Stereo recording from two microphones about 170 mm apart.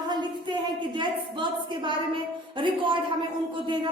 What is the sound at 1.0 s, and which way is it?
A woman's voice, 30° right (ahead or behind).